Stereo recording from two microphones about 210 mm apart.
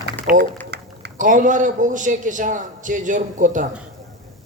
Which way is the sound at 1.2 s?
40° right (ahead or behind).